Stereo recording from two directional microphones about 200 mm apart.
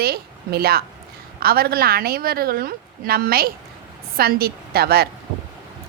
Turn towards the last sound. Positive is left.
turn(degrees=-50)  # may be behind; listen again after turning